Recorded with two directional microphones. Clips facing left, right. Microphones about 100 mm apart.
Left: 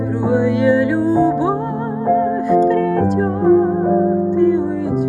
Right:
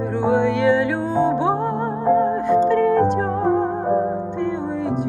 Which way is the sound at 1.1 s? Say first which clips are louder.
Left 3 dB; 20° right (ahead or behind).